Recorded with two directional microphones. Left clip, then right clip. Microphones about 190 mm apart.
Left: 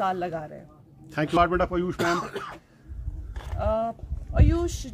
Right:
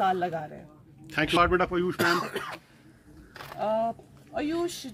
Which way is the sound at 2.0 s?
30° right (ahead or behind).